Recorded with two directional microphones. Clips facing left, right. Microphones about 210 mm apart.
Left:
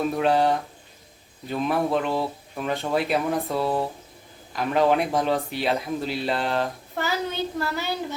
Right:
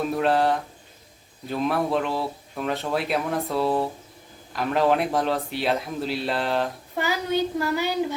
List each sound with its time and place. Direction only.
0.2 s speech: centre (ahead or behind)
6.9 s a child's voice: 15° right (ahead or behind)